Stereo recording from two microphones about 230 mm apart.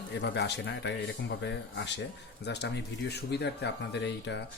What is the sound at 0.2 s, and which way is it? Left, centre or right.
Speech, left.